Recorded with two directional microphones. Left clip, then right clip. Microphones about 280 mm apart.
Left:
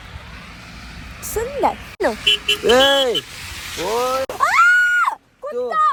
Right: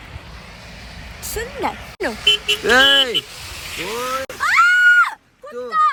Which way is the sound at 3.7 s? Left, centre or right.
Left.